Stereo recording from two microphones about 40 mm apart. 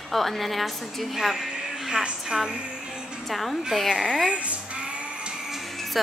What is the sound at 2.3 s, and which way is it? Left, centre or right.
Music, centre.